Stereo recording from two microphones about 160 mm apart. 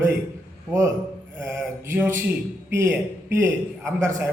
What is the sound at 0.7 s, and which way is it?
Speech, 15° right (ahead or behind).